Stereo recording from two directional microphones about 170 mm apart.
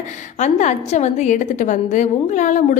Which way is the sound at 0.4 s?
45° left (ahead or behind).